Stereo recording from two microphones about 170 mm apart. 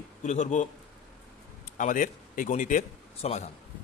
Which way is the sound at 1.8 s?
50° left (ahead or behind).